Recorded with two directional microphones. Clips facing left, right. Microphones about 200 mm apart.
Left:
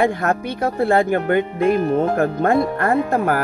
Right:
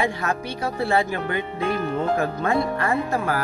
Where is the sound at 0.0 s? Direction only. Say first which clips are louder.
Left 6 dB; 55° left (ahead or behind).